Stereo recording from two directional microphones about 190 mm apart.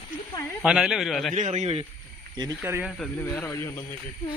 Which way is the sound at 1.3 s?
35° right (ahead or behind).